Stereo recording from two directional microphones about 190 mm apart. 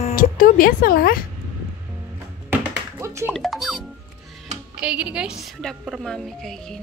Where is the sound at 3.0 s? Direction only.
15° right (ahead or behind).